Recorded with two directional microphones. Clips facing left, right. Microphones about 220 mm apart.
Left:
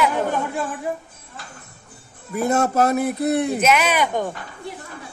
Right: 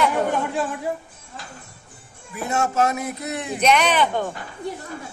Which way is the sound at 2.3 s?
40° left (ahead or behind).